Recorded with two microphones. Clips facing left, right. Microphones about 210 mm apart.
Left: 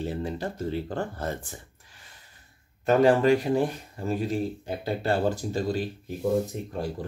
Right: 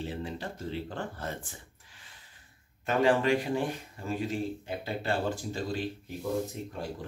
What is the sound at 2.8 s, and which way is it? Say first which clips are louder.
Speech: left 6 dB; 40° left (ahead or behind).